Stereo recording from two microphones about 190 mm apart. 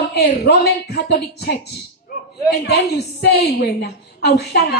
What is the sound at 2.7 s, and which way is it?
A woman's voice, 60° left (ahead or behind).